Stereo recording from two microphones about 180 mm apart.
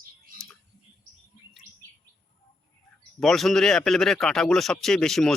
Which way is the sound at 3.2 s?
Centre (ahead or behind).